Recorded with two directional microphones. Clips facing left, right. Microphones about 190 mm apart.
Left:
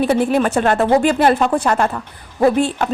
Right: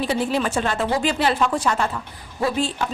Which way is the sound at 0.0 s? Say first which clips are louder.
Left 7 dB; 55° left (ahead or behind).